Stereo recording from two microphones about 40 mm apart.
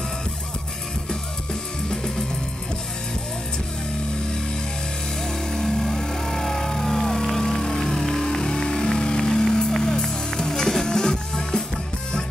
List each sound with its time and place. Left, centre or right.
1.5 s music: centre
5.2 s music: centre